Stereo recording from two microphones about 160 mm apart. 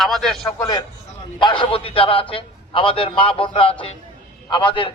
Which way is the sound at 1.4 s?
30° left (ahead or behind).